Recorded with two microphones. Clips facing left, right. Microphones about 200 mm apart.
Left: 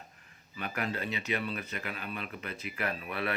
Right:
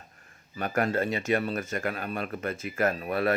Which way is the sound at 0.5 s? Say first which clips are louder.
Right 8 dB; 45° right (ahead or behind).